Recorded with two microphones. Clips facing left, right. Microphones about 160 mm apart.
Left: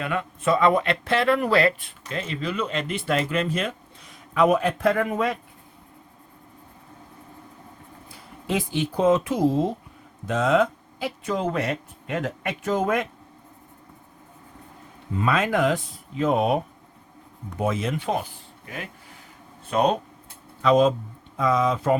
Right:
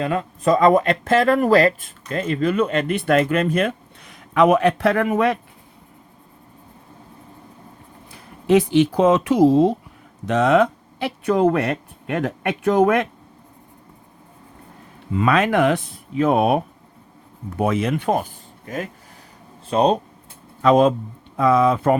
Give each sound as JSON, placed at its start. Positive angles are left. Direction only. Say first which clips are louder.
{"t": 0.0, "sound": "speech", "louder": "right 5 dB", "side_deg": -35}
{"t": 8.4, "sound": "speech", "louder": "right 11 dB", "side_deg": -80}
{"t": 15.1, "sound": "speech", "louder": "right 5 dB", "side_deg": -80}
{"t": 17.6, "sound": "speech", "louder": "right 5 dB", "side_deg": -65}
{"t": 19.6, "sound": "speech", "louder": "right 4 dB", "side_deg": -30}
{"t": 20.6, "sound": "speech", "louder": "right 3 dB", "side_deg": -55}